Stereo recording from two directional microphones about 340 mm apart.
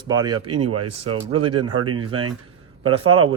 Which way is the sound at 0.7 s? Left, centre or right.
Right.